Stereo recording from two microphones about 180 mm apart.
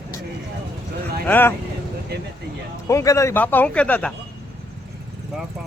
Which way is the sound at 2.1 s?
60° right (ahead or behind).